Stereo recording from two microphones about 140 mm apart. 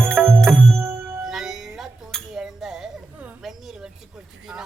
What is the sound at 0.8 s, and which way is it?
Music, 20° right (ahead or behind).